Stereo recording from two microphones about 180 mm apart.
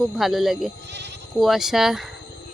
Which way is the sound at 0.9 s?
70° right (ahead or behind).